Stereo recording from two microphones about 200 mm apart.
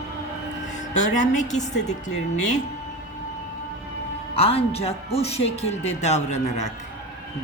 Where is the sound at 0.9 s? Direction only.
35° left (ahead or behind).